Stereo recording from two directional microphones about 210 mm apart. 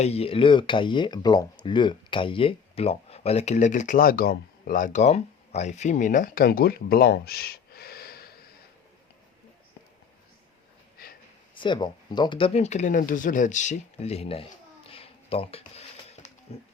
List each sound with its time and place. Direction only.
0.0 s speech: 30° left (ahead or behind); by 8.3 s 45° left (ahead or behind)
11.5 s speech: 20° left (ahead or behind)
14.8 s a sound: 25° left (ahead or behind)